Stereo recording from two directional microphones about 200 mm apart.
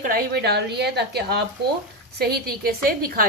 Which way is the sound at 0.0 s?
45° right (ahead or behind).